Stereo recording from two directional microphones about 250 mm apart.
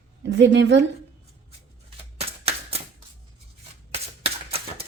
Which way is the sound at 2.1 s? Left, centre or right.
Right.